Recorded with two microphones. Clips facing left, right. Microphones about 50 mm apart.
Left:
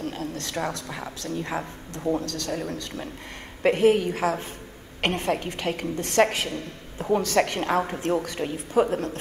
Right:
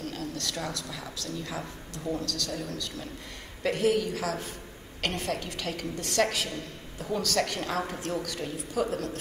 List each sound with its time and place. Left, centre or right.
0.0 s a woman's voice: left